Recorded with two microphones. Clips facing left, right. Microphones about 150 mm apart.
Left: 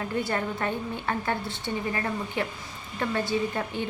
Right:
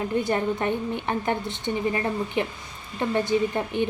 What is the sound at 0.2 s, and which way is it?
A woman's voice, 20° right (ahead or behind).